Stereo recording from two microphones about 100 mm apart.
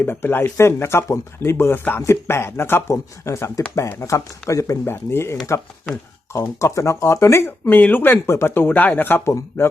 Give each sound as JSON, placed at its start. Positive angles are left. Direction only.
{"t": 0.0, "sound": "speech", "side_deg": 20}
{"t": 6.6, "sound": "speech", "side_deg": 30}